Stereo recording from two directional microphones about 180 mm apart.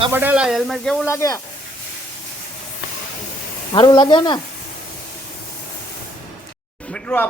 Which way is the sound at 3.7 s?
25° left (ahead or behind).